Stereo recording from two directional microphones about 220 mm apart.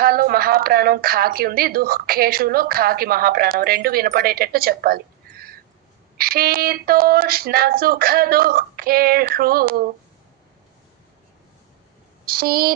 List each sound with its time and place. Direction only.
0.0 s a woman's voice: 40° right (ahead or behind)
12.3 s a woman's voice: 45° right (ahead or behind)